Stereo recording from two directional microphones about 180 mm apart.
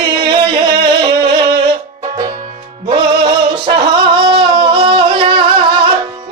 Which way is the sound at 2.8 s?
30° right (ahead or behind).